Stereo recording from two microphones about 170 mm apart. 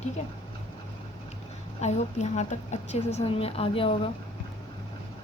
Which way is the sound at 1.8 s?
40° left (ahead or behind).